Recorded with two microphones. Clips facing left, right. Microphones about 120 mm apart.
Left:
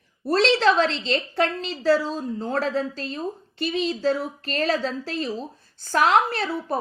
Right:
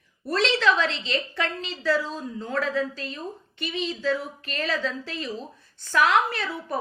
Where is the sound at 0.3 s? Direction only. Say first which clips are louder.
Left 4 dB; 35° left (ahead or behind).